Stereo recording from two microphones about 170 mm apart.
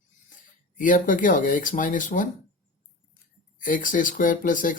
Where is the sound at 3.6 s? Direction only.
50° left (ahead or behind).